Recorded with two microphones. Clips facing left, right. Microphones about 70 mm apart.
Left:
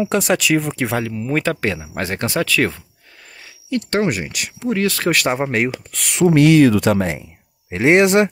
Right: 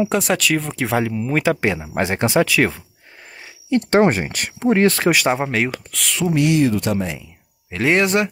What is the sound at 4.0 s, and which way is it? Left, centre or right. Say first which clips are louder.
Speech: right 4 dB; right.